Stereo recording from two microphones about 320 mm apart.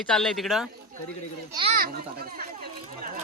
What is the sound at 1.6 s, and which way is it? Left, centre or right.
Speech, right.